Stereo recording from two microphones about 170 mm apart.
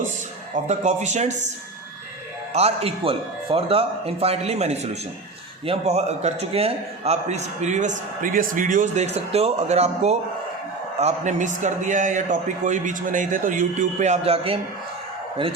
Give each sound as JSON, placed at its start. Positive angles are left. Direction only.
{"t": 0.5, "sound": "a man's voice", "side_deg": -40}
{"t": 2.5, "sound": "a man's voice", "side_deg": -40}